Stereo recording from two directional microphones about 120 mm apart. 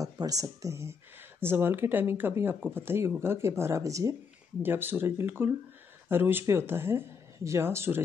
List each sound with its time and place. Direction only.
0.0 s speech: 30° right (ahead or behind)